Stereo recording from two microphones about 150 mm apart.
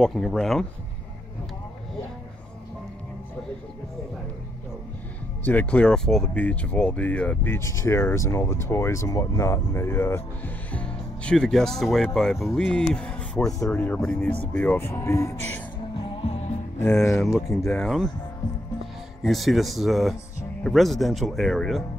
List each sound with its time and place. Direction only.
0.0 s speech: centre (ahead or behind)
5.4 s speech: 10° left (ahead or behind)
15.9 s music: 35° left (ahead or behind)
16.8 s speech: 20° left (ahead or behind)
17.2 s speech: centre (ahead or behind)
19.2 s speech: centre (ahead or behind)